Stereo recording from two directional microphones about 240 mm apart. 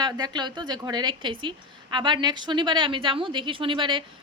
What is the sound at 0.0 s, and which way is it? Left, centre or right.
A woman's voice, centre.